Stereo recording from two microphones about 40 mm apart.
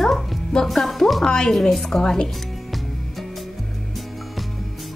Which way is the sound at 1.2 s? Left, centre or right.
Centre.